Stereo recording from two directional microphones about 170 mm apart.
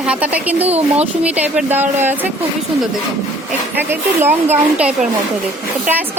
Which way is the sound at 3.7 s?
10° right (ahead or behind).